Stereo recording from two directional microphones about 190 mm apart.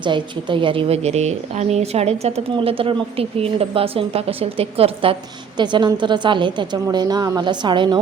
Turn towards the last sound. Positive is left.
turn(degrees=-25)  # may be behind; listen again after turning